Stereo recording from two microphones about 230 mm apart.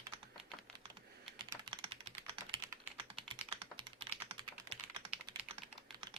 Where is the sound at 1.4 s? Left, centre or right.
Right.